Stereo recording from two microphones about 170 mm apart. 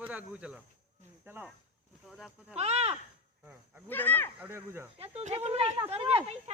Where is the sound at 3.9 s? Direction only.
10° left (ahead or behind).